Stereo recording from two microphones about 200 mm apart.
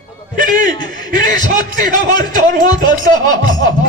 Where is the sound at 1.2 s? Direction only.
40° right (ahead or behind).